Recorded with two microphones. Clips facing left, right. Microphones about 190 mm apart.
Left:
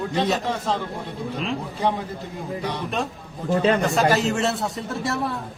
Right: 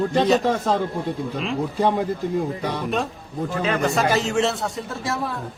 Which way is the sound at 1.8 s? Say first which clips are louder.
Right 4 dB; 50° right (ahead or behind).